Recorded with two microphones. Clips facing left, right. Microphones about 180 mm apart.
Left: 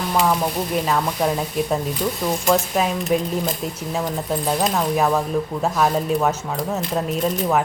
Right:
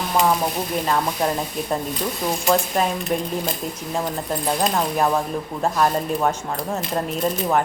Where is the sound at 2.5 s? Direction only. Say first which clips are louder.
Even; centre (ahead or behind).